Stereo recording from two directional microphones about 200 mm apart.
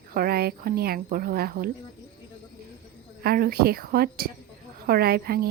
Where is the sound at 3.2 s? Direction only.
50° right (ahead or behind).